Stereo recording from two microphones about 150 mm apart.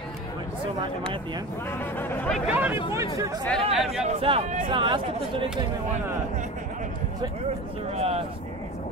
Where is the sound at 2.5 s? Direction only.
10° right (ahead or behind).